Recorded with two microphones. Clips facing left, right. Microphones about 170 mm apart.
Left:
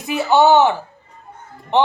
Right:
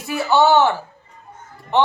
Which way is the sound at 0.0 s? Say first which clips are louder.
Left 2 dB; 20° left (ahead or behind).